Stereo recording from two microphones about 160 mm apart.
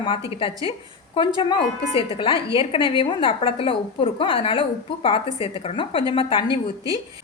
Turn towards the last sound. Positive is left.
turn(degrees=35)  # may be behind; listen again after turning